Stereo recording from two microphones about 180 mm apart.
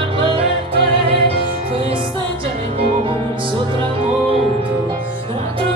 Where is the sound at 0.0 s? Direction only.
30° right (ahead or behind).